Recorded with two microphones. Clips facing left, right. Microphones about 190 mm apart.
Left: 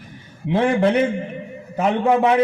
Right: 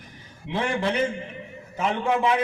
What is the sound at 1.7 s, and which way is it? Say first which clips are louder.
Speech: left 7 dB; 50° left (ahead or behind).